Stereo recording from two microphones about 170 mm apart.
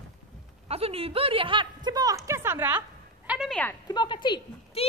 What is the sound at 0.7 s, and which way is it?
A man's voice, 35° right (ahead or behind).